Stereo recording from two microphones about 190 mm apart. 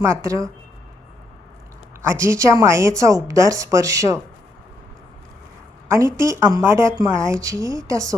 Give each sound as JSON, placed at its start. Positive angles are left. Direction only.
{"t": 0.0, "sound": "a woman's voice", "side_deg": -15}
{"t": 2.0, "sound": "a woman's voice", "side_deg": -15}
{"t": 6.1, "sound": "a woman's voice", "side_deg": -15}